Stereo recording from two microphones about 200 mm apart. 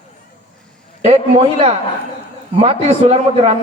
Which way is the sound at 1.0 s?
30° right (ahead or behind).